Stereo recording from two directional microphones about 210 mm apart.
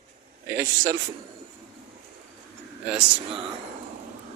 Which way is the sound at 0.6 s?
15° right (ahead or behind).